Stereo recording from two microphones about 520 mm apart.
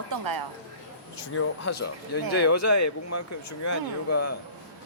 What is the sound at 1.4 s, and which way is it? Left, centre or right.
Speech, left.